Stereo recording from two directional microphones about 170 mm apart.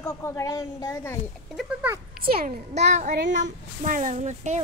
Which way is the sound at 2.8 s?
45° right (ahead or behind).